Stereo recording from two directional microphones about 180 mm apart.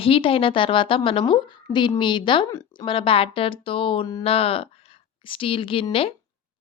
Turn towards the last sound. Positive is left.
turn(degrees=30)  # may be behind; listen again after turning